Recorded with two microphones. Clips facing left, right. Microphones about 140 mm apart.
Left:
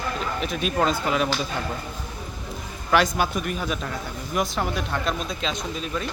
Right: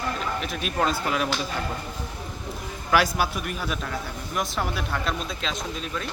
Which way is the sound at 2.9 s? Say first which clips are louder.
Left 1 dB; 5° right (ahead or behind).